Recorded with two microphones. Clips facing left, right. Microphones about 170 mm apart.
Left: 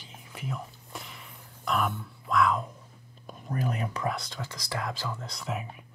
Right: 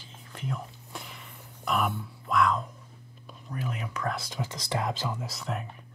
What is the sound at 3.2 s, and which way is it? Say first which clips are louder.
Speech: left 4 dB; 45° left (ahead or behind).